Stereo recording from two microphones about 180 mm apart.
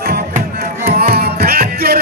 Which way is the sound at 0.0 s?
60° right (ahead or behind).